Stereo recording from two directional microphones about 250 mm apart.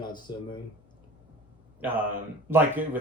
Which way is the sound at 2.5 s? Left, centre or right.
Centre.